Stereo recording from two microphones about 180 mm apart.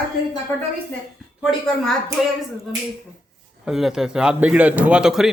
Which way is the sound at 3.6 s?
Centre (ahead or behind).